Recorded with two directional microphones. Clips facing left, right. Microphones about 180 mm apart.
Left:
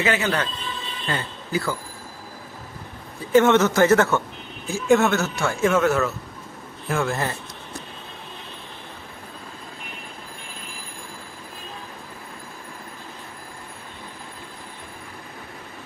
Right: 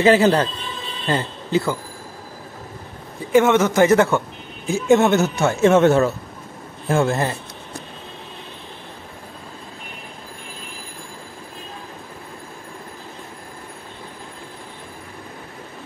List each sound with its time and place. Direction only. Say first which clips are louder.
0.0 s speech: right 9 dB; 30° right (ahead or behind)
3.3 s a man's voice: right 1 dB; 10° right (ahead or behind)